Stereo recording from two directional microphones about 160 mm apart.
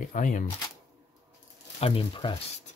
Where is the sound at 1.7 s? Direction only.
35° left (ahead or behind).